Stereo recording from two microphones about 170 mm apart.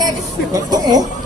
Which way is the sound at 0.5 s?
25° right (ahead or behind).